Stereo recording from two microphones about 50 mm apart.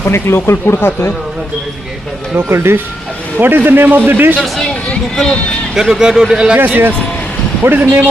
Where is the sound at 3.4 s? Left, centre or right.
Right.